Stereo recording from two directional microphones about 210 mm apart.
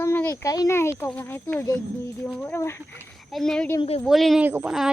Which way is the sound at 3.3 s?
Centre (ahead or behind).